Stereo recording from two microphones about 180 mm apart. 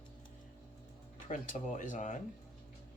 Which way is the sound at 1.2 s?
45° left (ahead or behind).